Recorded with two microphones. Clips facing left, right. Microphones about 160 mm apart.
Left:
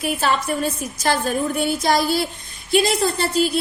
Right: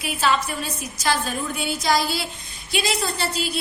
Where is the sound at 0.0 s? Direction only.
50° left (ahead or behind).